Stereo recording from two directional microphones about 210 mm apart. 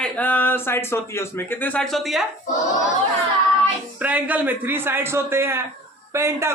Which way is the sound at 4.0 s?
5° right (ahead or behind).